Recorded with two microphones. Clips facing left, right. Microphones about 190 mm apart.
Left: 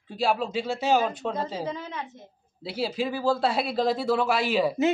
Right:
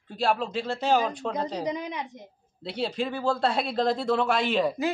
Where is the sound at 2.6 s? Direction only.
5° left (ahead or behind).